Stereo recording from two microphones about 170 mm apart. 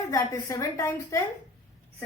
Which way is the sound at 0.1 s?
20° left (ahead or behind).